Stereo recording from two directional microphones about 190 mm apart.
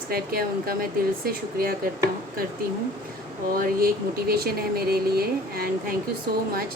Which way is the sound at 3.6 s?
50° right (ahead or behind).